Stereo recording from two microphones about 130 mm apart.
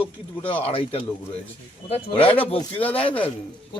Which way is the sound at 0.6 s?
45° left (ahead or behind).